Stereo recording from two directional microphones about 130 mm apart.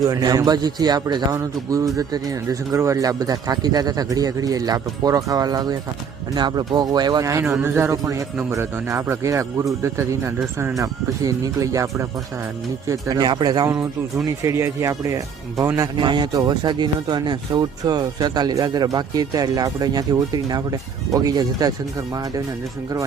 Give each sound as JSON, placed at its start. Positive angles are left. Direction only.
{"t": 0.0, "sound": "a man's voice", "side_deg": -30}
{"t": 10.8, "sound": "a man's voice", "side_deg": -25}
{"t": 14.4, "sound": "a man's voice", "side_deg": -20}
{"t": 16.0, "sound": "a man's voice", "side_deg": -35}